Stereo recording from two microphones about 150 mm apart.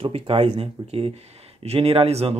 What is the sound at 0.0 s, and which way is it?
Speech, 40° right (ahead or behind).